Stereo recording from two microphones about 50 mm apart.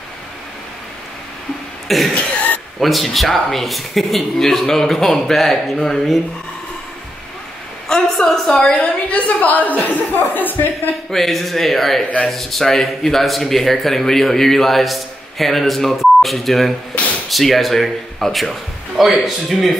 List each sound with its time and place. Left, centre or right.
1.9 s speech: centre
7.9 s a sound: centre
8.7 s a woman's voice: left
11.1 s speech: centre
16.9 s speech: left
17.3 s a man's voice: centre